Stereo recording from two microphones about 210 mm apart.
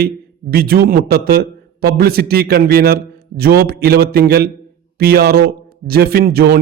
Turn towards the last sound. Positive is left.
turn(degrees=-45)  # may be behind; listen again after turning